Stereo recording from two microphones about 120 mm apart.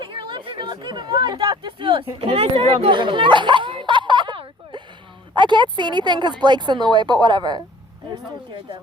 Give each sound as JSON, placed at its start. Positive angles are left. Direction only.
{"t": 0.0, "sound": "speech", "side_deg": -40}